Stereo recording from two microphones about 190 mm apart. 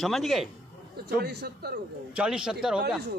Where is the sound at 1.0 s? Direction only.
60° right (ahead or behind).